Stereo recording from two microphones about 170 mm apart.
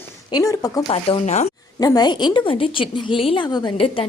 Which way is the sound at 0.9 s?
35° left (ahead or behind).